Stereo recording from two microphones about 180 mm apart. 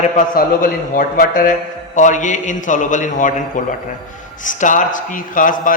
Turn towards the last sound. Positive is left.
turn(degrees=50)  # may be behind; listen again after turning